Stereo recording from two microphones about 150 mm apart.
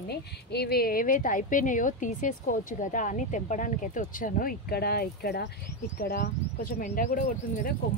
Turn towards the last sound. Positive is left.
turn(degrees=70)  # may be behind; listen again after turning